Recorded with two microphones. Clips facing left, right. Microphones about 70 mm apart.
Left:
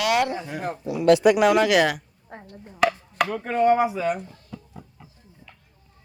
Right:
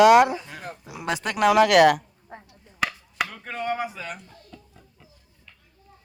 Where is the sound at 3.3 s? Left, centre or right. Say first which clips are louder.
Left 10 dB; centre.